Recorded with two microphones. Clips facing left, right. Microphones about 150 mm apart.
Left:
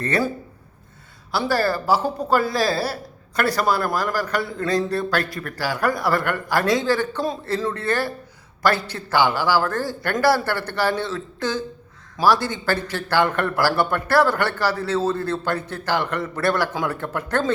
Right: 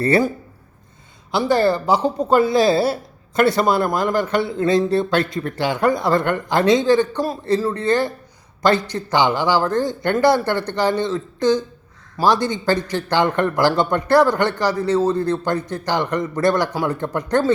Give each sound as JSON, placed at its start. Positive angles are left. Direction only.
{"t": 1.5, "sound": "a man's voice", "side_deg": -20}